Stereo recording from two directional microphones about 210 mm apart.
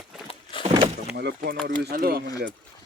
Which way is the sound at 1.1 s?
50° right (ahead or behind).